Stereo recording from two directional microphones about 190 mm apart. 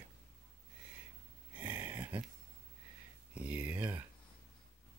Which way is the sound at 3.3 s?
5° right (ahead or behind).